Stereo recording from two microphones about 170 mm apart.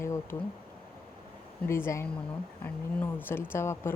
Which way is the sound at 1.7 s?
15° left (ahead or behind).